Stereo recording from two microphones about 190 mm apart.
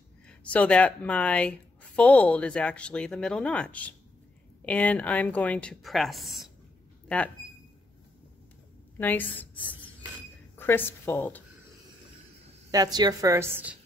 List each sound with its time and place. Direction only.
0.3 s speech: 5° left (ahead or behind)
8.9 s a woman's voice: 10° left (ahead or behind)
10.6 s a woman's voice: 10° left (ahead or behind)
12.7 s a woman's voice: 20° right (ahead or behind)